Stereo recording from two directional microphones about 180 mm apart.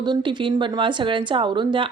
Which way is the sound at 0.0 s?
25° right (ahead or behind).